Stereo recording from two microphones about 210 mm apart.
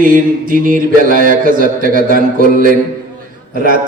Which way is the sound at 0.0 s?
40° right (ahead or behind).